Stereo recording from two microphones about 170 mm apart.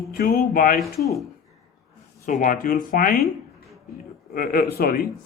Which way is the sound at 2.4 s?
50° left (ahead or behind).